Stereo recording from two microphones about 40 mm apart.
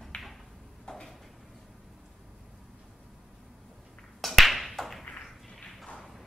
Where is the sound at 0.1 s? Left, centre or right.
Left.